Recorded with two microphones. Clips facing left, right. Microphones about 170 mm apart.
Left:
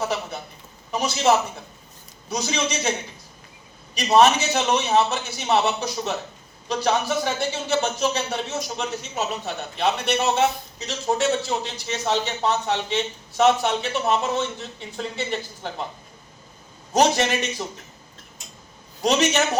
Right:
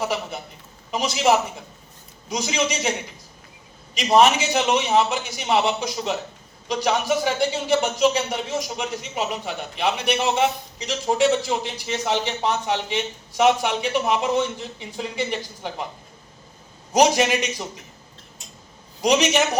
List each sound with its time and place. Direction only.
0.0 s a man's voice: 15° right (ahead or behind)
4.1 s speech: 10° right (ahead or behind)
16.9 s speech: 15° right (ahead or behind)
19.0 s speech: 15° right (ahead or behind)